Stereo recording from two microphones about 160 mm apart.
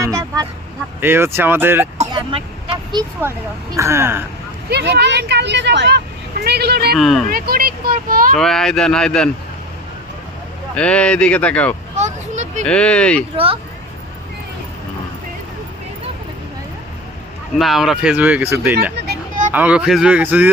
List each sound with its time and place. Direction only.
0.0 s speech: 20° right (ahead or behind)
3.8 s speech: 15° right (ahead or behind)
4.7 s speech: 90° right
6.9 s speech: centre (ahead or behind)
7.3 s speech: 65° right (ahead or behind)
8.4 s speech: 5° left (ahead or behind)
10.8 s speech: 5° left (ahead or behind)
11.9 s vehicle: 45° right (ahead or behind)
12.6 s speech: 5° left (ahead or behind)
13.3 s speech: 35° right (ahead or behind)
17.6 s speech: centre (ahead or behind)